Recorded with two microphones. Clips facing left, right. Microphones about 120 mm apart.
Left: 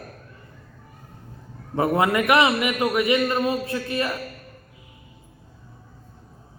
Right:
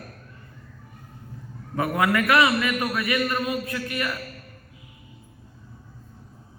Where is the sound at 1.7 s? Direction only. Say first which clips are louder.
Left 3 dB; 25° left (ahead or behind).